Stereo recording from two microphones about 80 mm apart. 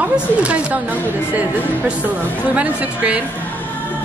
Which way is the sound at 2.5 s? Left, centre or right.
Centre.